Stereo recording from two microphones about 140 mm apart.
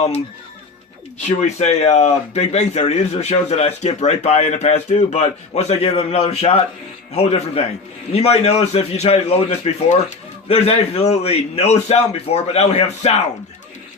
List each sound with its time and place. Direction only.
1.4 s a man's voice: 55° left (ahead or behind)